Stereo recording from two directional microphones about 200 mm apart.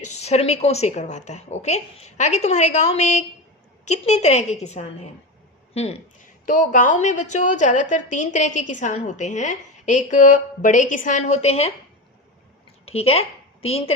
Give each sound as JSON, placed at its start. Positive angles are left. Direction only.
{"t": 0.2, "sound": "a woman's voice", "side_deg": 30}
{"t": 12.8, "sound": "a woman's voice", "side_deg": 30}